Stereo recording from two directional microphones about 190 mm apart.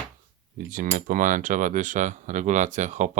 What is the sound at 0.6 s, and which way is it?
Cutlery, 45° right (ahead or behind).